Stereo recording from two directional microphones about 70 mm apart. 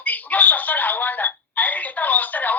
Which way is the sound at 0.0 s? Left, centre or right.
Left.